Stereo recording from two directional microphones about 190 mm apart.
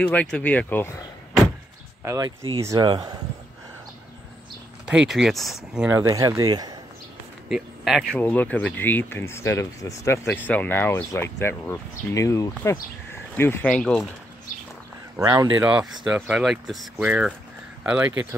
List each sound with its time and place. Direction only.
0.0 s speech: 5° left (ahead or behind)
2.0 s speech: 20° right (ahead or behind)
4.8 s speech: 5° right (ahead or behind); by 6.8 s 20° right (ahead or behind)
7.4 s speech: centre (ahead or behind)
15.1 s speech: 15° right (ahead or behind)
15.6 s speech: 5° right (ahead or behind)